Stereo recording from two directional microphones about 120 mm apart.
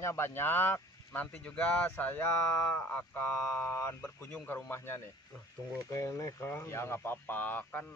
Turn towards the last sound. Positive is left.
turn(degrees=15)  # may be behind; listen again after turning